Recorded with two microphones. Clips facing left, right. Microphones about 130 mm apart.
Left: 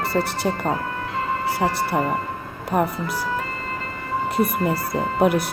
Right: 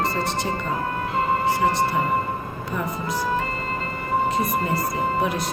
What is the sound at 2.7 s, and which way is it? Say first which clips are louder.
Speech: left 8 dB; 70° left (ahead or behind).